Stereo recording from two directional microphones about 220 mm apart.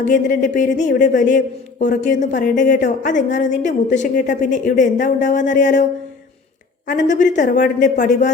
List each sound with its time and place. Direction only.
0.0 s a woman's voice: 35° left (ahead or behind)
7.3 s a woman's voice: 35° left (ahead or behind)